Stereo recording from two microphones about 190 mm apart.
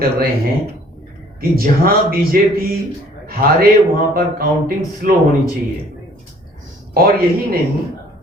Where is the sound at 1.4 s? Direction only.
50° right (ahead or behind).